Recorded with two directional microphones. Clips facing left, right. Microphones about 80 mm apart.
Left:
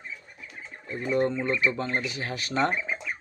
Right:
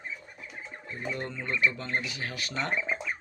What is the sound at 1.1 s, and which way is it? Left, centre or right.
Speech, left.